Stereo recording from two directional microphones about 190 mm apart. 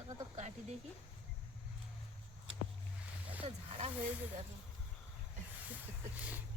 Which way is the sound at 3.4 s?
35° right (ahead or behind).